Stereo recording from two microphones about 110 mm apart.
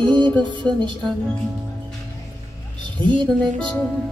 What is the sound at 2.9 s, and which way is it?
Music, 45° right (ahead or behind).